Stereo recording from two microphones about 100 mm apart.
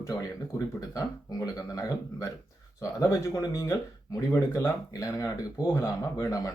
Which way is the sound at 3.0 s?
35° left (ahead or behind).